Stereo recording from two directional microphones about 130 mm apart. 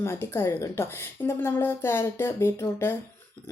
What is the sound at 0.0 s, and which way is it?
Speech, 20° left (ahead or behind).